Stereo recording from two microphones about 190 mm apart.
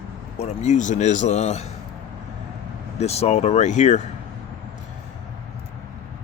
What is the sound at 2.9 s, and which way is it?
A man's voice, 35° left (ahead or behind).